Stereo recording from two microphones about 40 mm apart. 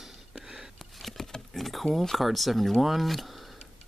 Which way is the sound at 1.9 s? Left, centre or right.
Centre.